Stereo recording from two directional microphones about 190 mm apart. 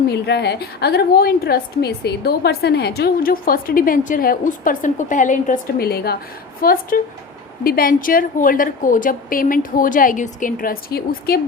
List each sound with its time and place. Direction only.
0.1 s a woman's voice: 60° left (ahead or behind)